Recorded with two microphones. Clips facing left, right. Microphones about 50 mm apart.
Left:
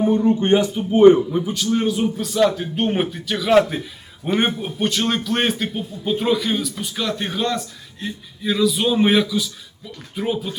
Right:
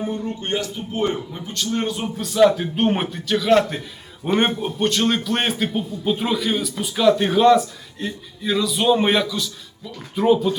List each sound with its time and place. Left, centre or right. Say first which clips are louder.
0.4 s a man's voice: left 8 dB; left; by 10.5 s centre